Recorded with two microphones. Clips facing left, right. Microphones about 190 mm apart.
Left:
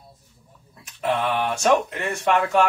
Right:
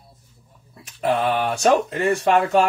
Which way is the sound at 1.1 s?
35° right (ahead or behind).